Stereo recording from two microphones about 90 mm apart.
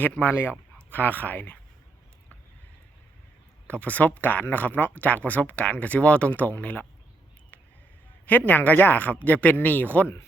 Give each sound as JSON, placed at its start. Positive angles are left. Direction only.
{"t": 0.0, "sound": "speech", "side_deg": 20}
{"t": 3.7, "sound": "speech", "side_deg": 15}
{"t": 8.3, "sound": "speech", "side_deg": 20}